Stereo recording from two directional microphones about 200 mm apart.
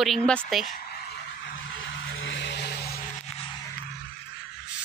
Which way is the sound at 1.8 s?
65° left (ahead or behind).